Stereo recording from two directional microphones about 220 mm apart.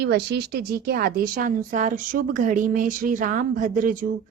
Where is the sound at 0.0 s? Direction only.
50° right (ahead or behind).